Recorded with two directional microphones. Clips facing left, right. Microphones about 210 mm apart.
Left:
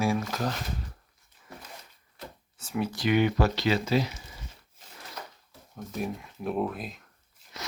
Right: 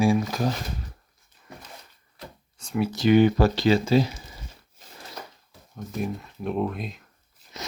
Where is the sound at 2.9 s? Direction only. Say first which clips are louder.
Right 7 dB; 30° right (ahead or behind).